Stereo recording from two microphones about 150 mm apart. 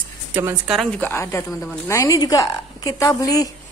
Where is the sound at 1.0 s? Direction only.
15° left (ahead or behind).